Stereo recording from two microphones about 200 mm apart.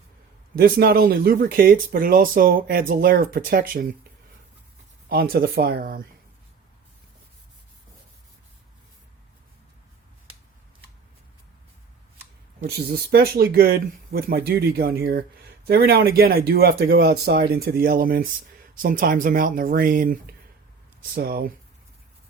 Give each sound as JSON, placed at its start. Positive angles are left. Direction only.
{"t": 0.5, "sound": "speech", "side_deg": -50}
{"t": 5.0, "sound": "speech", "side_deg": -50}
{"t": 12.6, "sound": "speech", "side_deg": -55}